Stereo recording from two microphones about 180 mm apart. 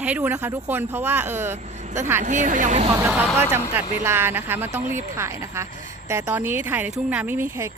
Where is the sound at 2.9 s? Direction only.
15° right (ahead or behind).